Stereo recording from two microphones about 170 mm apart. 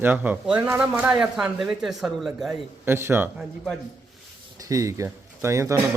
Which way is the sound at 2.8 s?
15° right (ahead or behind).